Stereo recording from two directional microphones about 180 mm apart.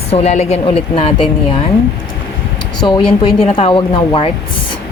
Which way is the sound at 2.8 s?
25° left (ahead or behind).